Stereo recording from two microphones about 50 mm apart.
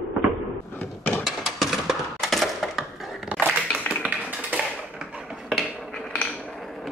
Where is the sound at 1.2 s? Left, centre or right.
Centre.